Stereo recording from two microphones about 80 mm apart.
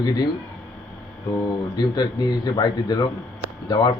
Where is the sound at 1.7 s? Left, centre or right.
Left.